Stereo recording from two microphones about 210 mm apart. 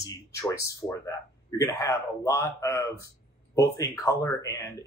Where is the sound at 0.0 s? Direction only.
15° left (ahead or behind).